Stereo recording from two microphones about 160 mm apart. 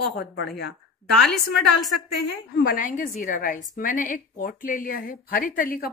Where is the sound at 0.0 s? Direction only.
75° left (ahead or behind).